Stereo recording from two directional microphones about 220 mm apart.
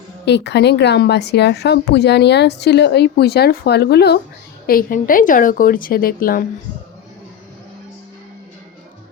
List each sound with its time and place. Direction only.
0.3 s a woman's voice: 50° left (ahead or behind)